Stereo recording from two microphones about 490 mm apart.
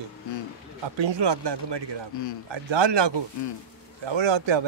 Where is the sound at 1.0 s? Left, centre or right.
Right.